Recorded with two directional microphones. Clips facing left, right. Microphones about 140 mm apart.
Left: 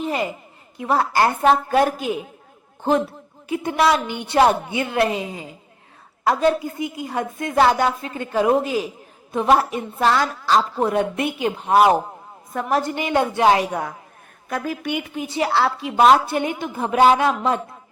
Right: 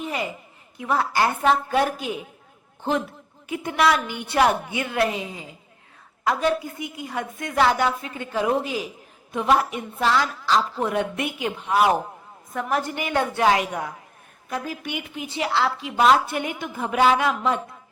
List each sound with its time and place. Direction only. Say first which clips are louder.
0.8 s a woman's voice: left 3 dB; 40° left (ahead or behind)
3.5 s a woman's voice: left 3 dB; 30° left (ahead or behind)
6.2 s a woman's voice: left 4 dB; 35° left (ahead or behind)
9.3 s a woman's voice: left 3 dB; 35° left (ahead or behind)
10.8 s a woman's voice: left 4 dB; 30° left (ahead or behind)
14.8 s a woman's voice: left 6 dB; 40° left (ahead or behind)